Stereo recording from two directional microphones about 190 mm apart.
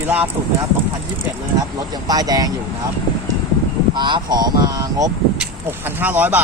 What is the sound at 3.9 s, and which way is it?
Speech, 25° right (ahead or behind).